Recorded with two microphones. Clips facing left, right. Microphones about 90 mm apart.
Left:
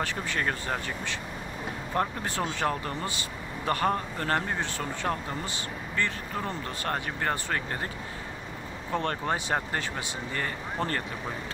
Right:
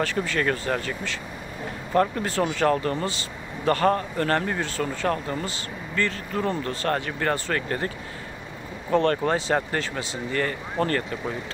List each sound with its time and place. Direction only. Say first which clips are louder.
0.0 s speech: right 5 dB; 20° left (ahead or behind)
8.9 s speech: right 8 dB; 10° left (ahead or behind)